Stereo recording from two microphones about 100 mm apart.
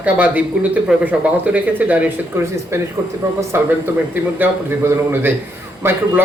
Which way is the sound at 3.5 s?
25° right (ahead or behind).